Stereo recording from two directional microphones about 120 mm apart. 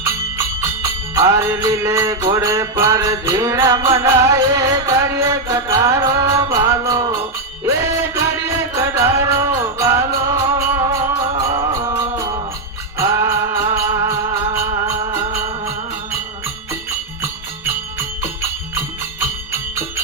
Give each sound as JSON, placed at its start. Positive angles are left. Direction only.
{"t": 0.0, "sound": "music", "side_deg": -25}
{"t": 8.7, "sound": "music", "side_deg": -25}